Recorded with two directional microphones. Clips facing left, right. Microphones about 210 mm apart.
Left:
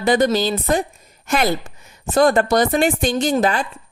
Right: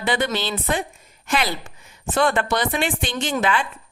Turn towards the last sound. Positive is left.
turn(degrees=40)  # may be behind; listen again after turning